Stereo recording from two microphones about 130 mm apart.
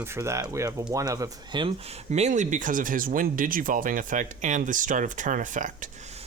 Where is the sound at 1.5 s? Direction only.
45° right (ahead or behind); by 5.9 s 80° right.